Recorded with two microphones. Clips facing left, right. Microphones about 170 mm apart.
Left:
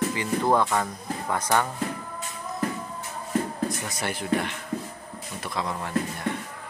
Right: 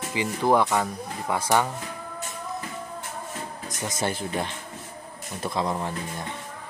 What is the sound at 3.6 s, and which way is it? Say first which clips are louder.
Speech: right 2 dB; 20° right (ahead or behind).